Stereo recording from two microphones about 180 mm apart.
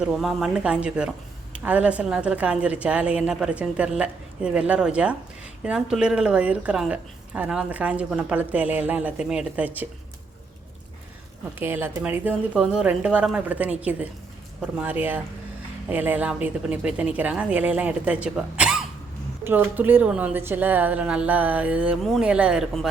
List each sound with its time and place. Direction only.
0.0 s speech: centre (ahead or behind)
11.6 s speech: 10° right (ahead or behind)